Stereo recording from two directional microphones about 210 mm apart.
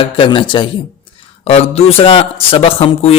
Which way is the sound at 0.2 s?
25° left (ahead or behind).